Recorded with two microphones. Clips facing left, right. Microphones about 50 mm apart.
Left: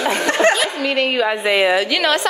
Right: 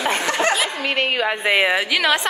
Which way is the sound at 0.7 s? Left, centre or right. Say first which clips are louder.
Left 3 dB; right.